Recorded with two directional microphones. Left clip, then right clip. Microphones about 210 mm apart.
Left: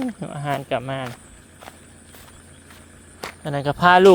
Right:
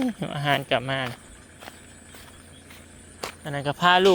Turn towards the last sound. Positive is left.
turn(degrees=25)  # may be behind; listen again after turning